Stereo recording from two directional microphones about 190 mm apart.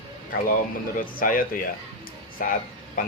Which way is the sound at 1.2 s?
45° left (ahead or behind).